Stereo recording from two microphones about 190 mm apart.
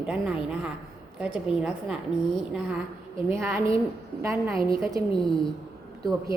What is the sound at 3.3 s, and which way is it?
A woman's voice, 15° right (ahead or behind).